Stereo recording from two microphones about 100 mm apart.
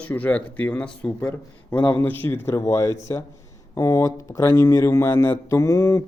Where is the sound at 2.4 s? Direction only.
30° left (ahead or behind).